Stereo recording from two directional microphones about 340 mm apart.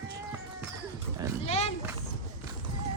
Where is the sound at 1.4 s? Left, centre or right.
Centre.